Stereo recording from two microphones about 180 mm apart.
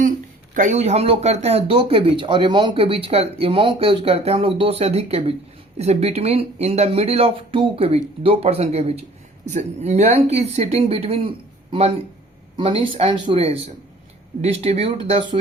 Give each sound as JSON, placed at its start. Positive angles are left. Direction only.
{"t": 0.5, "sound": "speech", "side_deg": -45}